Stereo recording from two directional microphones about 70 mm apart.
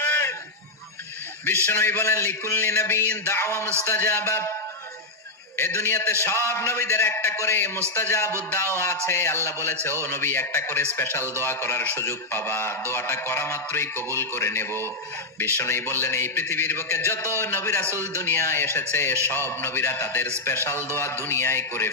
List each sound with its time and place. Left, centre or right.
0.0 s honk: left
1.6 s a man's voice: left
5.5 s a man's voice: left